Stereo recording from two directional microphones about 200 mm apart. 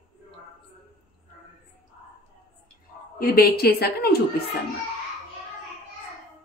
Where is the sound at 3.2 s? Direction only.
50° left (ahead or behind).